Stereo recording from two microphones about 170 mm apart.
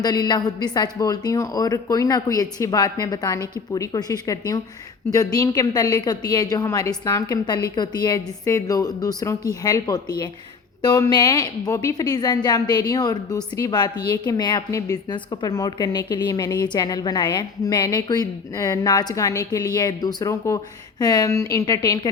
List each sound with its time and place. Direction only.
0.0 s a woman's voice: 25° left (ahead or behind)